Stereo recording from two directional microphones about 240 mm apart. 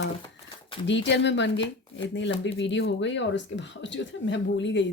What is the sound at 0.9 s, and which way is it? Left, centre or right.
Speech, left.